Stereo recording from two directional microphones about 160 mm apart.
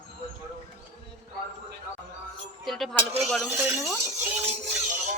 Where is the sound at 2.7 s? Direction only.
Centre (ahead or behind).